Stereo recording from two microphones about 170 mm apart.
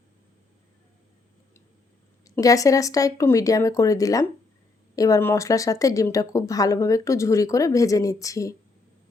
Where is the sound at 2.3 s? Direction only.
20° left (ahead or behind).